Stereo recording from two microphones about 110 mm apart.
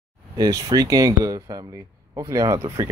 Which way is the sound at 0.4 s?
30° right (ahead or behind).